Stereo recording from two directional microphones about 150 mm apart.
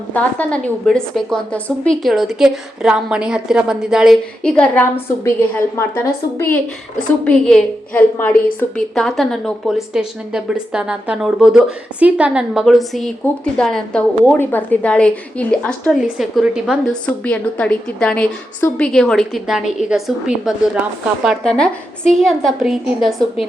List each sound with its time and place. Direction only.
0.1 s a woman's voice: 10° left (ahead or behind)
7.3 s a woman's voice: 5° left (ahead or behind)